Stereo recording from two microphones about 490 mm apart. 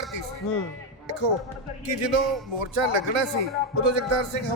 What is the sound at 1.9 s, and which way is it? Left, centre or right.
Speech, right.